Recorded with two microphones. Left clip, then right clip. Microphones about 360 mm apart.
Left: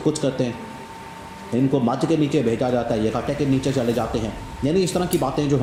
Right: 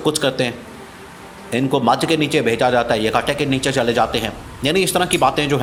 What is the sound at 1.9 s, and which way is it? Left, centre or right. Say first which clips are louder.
Speech: right 5 dB; right.